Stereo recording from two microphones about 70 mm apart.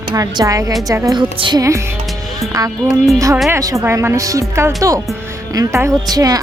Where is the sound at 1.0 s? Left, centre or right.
Right.